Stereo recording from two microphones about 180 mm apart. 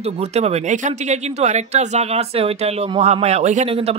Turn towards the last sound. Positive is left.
turn(degrees=-35)  # may be behind; listen again after turning